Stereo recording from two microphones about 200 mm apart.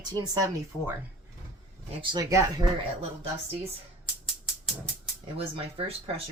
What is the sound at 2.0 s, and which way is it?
Speech, 20° right (ahead or behind).